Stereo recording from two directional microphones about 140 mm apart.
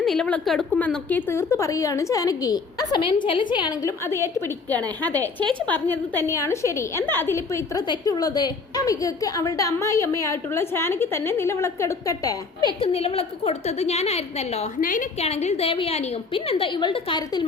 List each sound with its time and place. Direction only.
0.0 s a woman's voice: 5° left (ahead or behind); by 12.6 s 25° left (ahead or behind)
12.8 s a woman's voice: 45° left (ahead or behind)
14.8 s a woman's voice: 75° left (ahead or behind)
15.2 s a woman's voice: 50° left (ahead or behind); by 17.4 s 35° left (ahead or behind)